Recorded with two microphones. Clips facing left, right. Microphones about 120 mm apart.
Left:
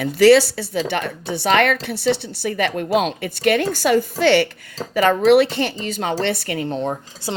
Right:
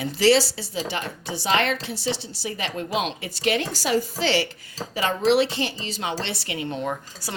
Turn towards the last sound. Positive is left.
turn(degrees=30)  # may be behind; listen again after turning